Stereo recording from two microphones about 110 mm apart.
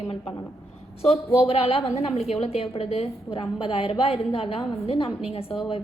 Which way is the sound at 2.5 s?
70° left (ahead or behind).